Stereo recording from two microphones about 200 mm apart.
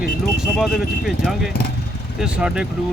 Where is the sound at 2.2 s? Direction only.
5° right (ahead or behind).